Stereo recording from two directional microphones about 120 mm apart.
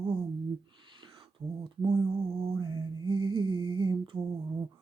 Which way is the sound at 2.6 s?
40° right (ahead or behind).